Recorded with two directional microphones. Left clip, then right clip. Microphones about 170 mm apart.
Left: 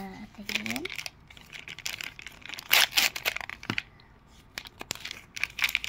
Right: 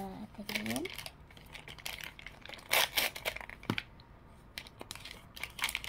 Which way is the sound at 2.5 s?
10° right (ahead or behind).